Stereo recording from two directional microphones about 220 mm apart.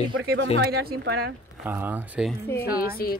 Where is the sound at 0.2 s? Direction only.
55° right (ahead or behind).